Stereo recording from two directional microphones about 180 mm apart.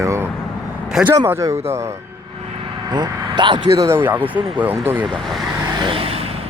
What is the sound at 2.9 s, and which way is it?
Speech, 25° right (ahead or behind).